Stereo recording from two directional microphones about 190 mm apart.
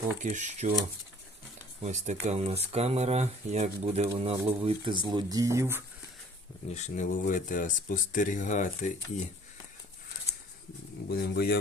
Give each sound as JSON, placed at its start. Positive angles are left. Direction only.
{"t": 0.2, "sound": "speech", "side_deg": -40}
{"t": 1.8, "sound": "speech", "side_deg": -35}
{"t": 6.7, "sound": "speech", "side_deg": 40}
{"t": 11.1, "sound": "speech", "side_deg": 55}